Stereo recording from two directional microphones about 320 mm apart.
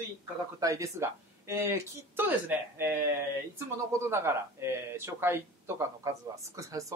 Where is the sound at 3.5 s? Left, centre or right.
Centre.